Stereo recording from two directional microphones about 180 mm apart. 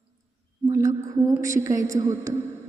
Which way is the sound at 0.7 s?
15° right (ahead or behind).